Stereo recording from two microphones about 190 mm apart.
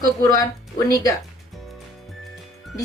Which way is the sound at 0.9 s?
15° left (ahead or behind).